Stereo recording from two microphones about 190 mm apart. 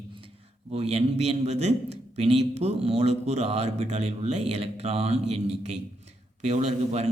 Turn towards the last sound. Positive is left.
turn(degrees=-35)  # may be behind; listen again after turning